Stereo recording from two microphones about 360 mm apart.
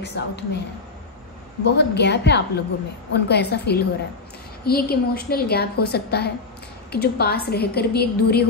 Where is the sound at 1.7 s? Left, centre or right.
Left.